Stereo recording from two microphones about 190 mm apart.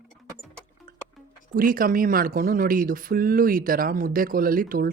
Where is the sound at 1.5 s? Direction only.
45° right (ahead or behind).